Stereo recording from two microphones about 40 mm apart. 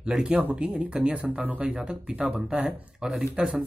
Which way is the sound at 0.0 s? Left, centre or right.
Right.